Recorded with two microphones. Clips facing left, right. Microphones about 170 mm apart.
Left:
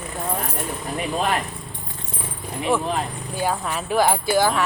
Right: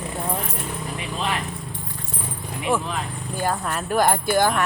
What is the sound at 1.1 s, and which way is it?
Speech, 50° left (ahead or behind).